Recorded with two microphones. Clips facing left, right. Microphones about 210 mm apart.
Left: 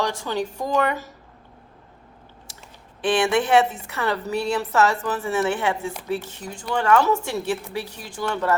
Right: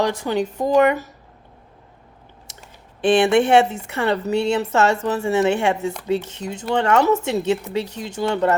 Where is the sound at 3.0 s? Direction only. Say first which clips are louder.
Right 5 dB; 25° right (ahead or behind).